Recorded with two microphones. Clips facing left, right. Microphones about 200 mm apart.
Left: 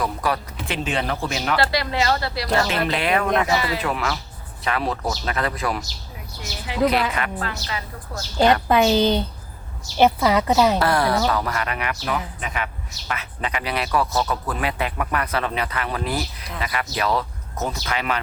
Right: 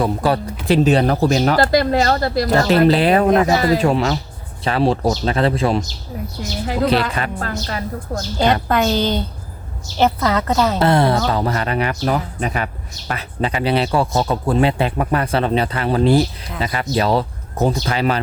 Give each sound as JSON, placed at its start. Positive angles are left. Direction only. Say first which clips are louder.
{"t": 0.0, "sound": "speech", "louder": "right 6 dB", "side_deg": -30}
{"t": 3.4, "sound": "a woman's voice", "louder": "right 7 dB", "side_deg": -45}
{"t": 3.8, "sound": "speech", "louder": "right 8 dB", "side_deg": -30}
{"t": 7.1, "sound": "speech", "louder": "right 3 dB", "side_deg": -30}
{"t": 7.4, "sound": "a woman's voice", "louder": "right 5 dB", "side_deg": -45}
{"t": 8.6, "sound": "a woman's voice", "louder": "even", "side_deg": 10}
{"t": 10.2, "sound": "a woman's voice", "louder": "even", "side_deg": 10}
{"t": 10.8, "sound": "speech", "louder": "right 4 dB", "side_deg": -25}